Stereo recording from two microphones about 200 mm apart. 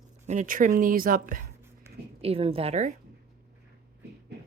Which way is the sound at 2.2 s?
30° right (ahead or behind).